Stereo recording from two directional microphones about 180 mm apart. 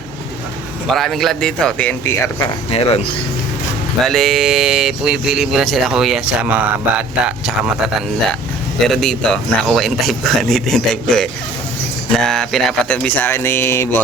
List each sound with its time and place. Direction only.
0.9 s speech: centre (ahead or behind)
2.6 s speech: 35° left (ahead or behind)
4.0 s speech: centre (ahead or behind)
8.9 s speech: 5° left (ahead or behind)